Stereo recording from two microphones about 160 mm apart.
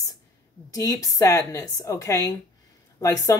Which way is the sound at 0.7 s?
20° left (ahead or behind).